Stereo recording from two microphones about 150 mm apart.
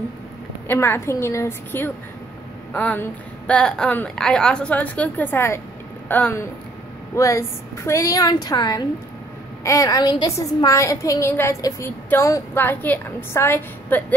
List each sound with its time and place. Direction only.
0.7 s a woman's voice: 15° left (ahead or behind)